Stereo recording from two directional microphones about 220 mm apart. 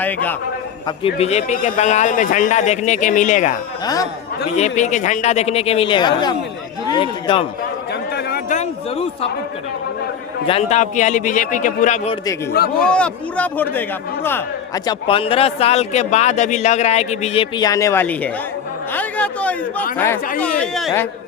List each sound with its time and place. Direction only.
0.0 s a man's voice: 10° left (ahead or behind)
0.9 s speech: 25° left (ahead or behind)
3.8 s a man's voice: 15° left (ahead or behind)
4.4 s a man's voice: 30° left (ahead or behind)
8.1 s a sound: 40° left (ahead or behind)
10.4 s speech: 30° left (ahead or behind)
12.8 s speech: 5° left (ahead or behind)
14.8 s a man's voice: 25° left (ahead or behind); by 19.5 s 5° left (ahead or behind)
20.6 s speech: 5° left (ahead or behind)